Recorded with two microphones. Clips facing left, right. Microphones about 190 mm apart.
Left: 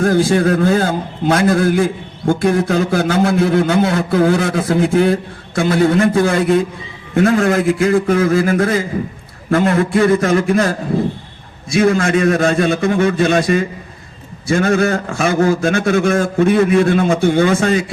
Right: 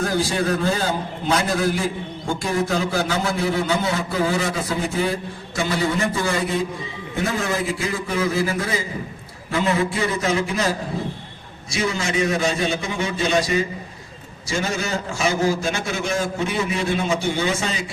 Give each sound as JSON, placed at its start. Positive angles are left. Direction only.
{"t": 0.0, "sound": "a man's voice", "side_deg": 50}